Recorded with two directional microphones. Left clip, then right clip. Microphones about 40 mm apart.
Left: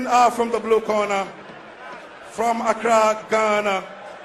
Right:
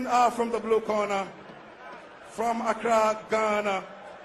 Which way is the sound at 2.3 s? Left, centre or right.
Left.